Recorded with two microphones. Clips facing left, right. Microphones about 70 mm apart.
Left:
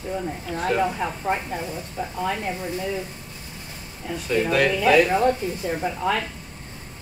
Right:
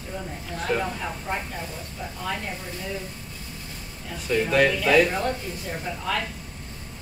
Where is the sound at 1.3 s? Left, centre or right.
Left.